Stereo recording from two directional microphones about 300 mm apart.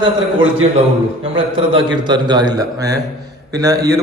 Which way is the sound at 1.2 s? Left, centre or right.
Centre.